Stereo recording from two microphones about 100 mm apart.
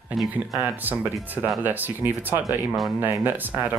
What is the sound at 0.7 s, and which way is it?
Speech, 15° right (ahead or behind).